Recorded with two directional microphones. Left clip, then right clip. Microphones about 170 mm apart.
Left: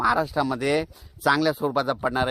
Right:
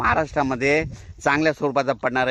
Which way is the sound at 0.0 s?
35° right (ahead or behind).